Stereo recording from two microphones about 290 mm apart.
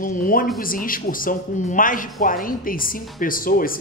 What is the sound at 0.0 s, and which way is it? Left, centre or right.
A woman's voice, left.